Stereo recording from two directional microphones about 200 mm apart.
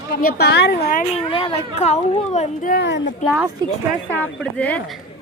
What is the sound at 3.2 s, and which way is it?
Speech, centre (ahead or behind).